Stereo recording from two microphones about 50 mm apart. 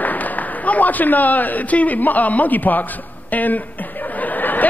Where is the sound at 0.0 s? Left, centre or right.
Left.